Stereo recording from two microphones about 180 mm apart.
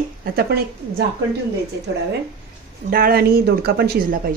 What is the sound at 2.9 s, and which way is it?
Speech, 55° right (ahead or behind).